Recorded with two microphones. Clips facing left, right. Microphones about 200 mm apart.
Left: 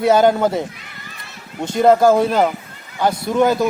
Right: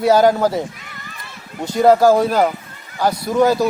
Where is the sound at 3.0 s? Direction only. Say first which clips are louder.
Even; 25° left (ahead or behind).